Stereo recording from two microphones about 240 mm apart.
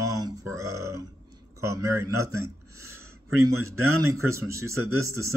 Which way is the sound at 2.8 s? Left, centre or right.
Right.